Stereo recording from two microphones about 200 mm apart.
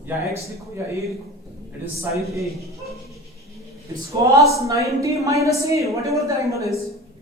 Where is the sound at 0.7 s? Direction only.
15° right (ahead or behind).